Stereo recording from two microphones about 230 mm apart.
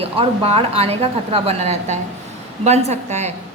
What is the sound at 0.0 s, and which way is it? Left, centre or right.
A woman's voice, right.